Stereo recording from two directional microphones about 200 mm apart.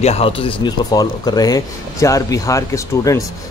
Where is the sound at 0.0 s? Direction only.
30° left (ahead or behind).